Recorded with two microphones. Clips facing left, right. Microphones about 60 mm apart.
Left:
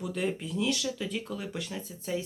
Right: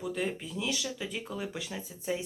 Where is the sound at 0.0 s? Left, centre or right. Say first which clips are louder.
Left 2 dB; centre.